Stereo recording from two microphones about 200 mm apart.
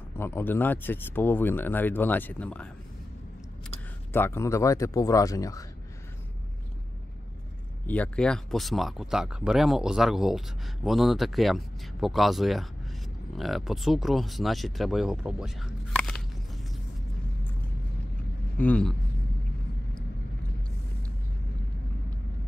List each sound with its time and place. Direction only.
0.1 s speech: 10° left (ahead or behind)
4.1 s speech: 10° left (ahead or behind)
7.8 s speech: 5° left (ahead or behind)
18.6 s speech: 5° left (ahead or behind)